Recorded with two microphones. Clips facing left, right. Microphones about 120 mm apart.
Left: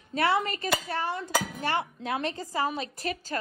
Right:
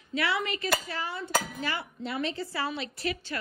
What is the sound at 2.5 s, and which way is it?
Speech, 40° left (ahead or behind).